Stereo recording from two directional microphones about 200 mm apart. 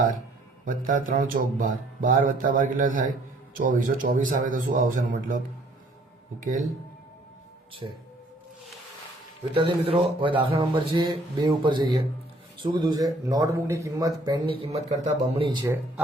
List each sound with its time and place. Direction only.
0.6 s music: 40° right (ahead or behind)
3.6 s a man's voice: 40° right (ahead or behind)
6.4 s music: 40° right (ahead or behind)
7.8 s speech: 25° right (ahead or behind)
9.6 s speech: 25° right (ahead or behind)
14.6 s music: 30° right (ahead or behind)
15.0 s speech: 25° right (ahead or behind)